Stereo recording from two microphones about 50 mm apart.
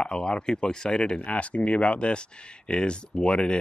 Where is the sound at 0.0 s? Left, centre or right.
Centre.